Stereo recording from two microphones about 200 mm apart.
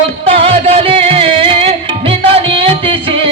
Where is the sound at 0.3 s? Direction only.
30° right (ahead or behind).